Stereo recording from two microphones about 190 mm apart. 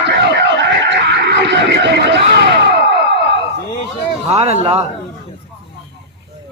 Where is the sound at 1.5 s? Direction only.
65° right (ahead or behind).